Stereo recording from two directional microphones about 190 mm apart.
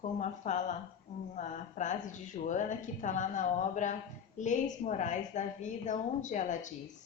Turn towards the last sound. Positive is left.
turn(degrees=40)  # may be behind; listen again after turning